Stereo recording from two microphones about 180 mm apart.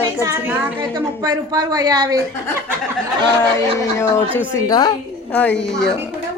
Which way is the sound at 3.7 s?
15° left (ahead or behind).